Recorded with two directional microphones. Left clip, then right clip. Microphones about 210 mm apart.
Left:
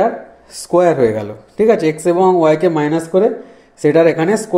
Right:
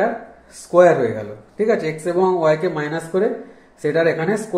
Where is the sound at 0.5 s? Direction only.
40° left (ahead or behind).